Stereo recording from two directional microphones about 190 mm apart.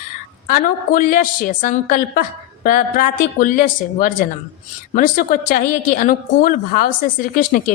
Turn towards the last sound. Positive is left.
turn(degrees=45)  # may be behind; listen again after turning